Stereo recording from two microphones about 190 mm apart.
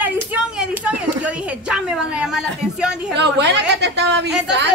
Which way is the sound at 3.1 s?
65° right (ahead or behind).